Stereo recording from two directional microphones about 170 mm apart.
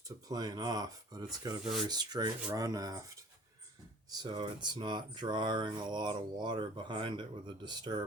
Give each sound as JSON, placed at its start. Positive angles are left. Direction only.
{"t": 0.3, "sound": "speech", "side_deg": -20}
{"t": 4.1, "sound": "speech", "side_deg": -25}